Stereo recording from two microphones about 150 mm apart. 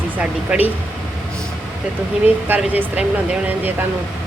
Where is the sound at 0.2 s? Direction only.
10° right (ahead or behind).